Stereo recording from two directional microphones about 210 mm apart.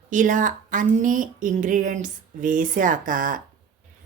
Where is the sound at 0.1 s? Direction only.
40° right (ahead or behind).